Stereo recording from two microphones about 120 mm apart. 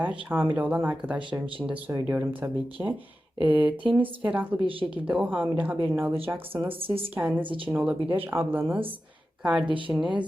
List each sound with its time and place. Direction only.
0.0 s speech: 10° right (ahead or behind)
1.9 s speech: 25° right (ahead or behind)
3.4 s speech: 15° right (ahead or behind)
6.7 s speech: 50° right (ahead or behind)
7.1 s speech: 15° right (ahead or behind)
7.4 s speech: 45° right (ahead or behind)
7.7 s speech: 10° right (ahead or behind)
9.4 s speech: 5° right (ahead or behind)
9.6 s speech: 45° right (ahead or behind)
9.9 s speech: 5° right (ahead or behind)